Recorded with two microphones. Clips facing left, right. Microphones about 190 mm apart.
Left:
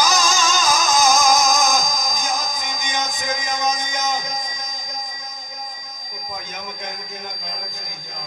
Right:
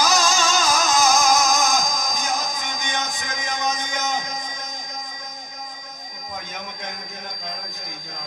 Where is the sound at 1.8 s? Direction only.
60° right (ahead or behind).